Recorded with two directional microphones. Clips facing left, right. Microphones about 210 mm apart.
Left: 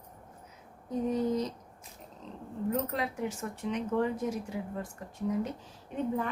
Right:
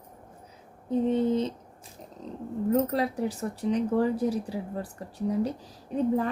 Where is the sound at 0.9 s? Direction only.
30° right (ahead or behind).